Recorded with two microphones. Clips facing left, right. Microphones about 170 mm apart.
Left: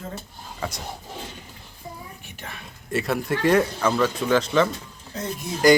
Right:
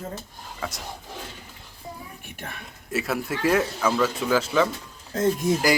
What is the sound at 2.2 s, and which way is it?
Whispering, 55° right (ahead or behind).